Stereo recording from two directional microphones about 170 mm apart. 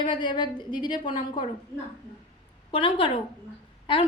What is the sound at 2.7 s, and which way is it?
A woman's voice, 30° left (ahead or behind).